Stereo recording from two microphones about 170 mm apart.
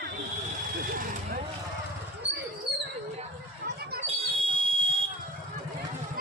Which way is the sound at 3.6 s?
70° right (ahead or behind).